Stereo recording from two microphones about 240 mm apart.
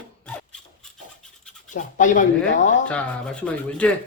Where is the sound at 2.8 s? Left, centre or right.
Centre.